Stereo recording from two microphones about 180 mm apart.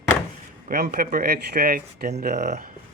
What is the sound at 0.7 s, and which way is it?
Speech, 55° right (ahead or behind).